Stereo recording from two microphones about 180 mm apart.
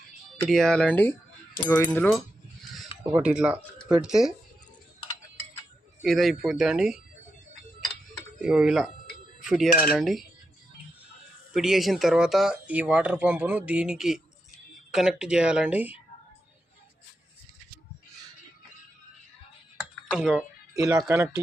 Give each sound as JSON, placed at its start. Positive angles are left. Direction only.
{"t": 0.4, "sound": "speech", "side_deg": 0}
{"t": 3.0, "sound": "speech", "side_deg": -10}
{"t": 6.0, "sound": "speech", "side_deg": 0}
{"t": 8.4, "sound": "speech", "side_deg": -5}
{"t": 11.5, "sound": "speech", "side_deg": 0}
{"t": 20.1, "sound": "speech", "side_deg": -5}
{"t": 20.7, "sound": "speech", "side_deg": -20}